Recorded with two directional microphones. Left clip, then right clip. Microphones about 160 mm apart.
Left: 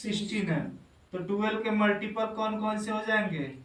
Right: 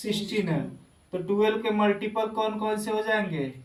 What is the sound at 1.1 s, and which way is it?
Speech, 25° right (ahead or behind).